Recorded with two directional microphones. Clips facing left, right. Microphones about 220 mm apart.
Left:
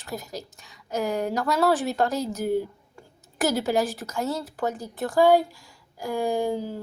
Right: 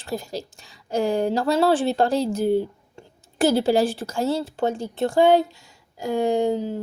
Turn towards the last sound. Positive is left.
turn(degrees=-20)  # may be behind; listen again after turning